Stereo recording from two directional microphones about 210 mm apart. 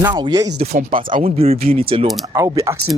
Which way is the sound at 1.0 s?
35° right (ahead or behind).